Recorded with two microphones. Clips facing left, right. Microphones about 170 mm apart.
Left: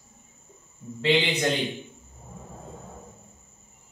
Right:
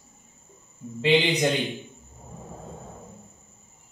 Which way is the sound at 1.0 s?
15° right (ahead or behind).